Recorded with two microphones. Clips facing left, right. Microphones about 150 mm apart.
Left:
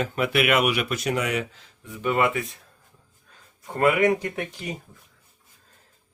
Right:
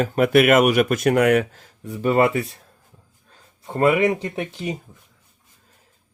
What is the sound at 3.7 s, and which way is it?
Speech, 25° right (ahead or behind).